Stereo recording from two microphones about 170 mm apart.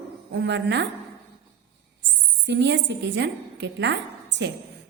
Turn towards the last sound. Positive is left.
turn(degrees=-90)